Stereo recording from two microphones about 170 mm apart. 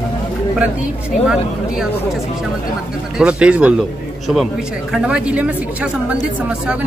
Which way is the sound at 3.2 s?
5° right (ahead or behind).